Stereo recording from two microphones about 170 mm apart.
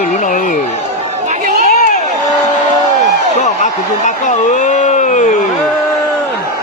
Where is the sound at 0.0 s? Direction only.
50° left (ahead or behind).